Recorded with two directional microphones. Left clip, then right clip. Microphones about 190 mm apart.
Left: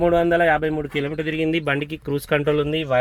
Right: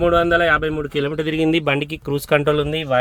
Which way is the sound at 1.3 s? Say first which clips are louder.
Right 4 dB; 25° right (ahead or behind).